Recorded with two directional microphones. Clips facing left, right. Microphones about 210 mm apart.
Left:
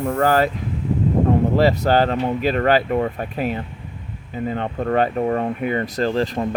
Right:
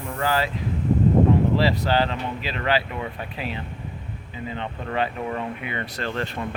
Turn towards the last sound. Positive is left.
turn(degrees=40)  # may be behind; listen again after turning